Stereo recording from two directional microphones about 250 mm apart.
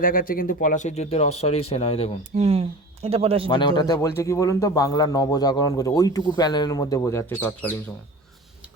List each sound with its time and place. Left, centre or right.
0.0 s speech: left
2.3 s speech: right
3.5 s speech: centre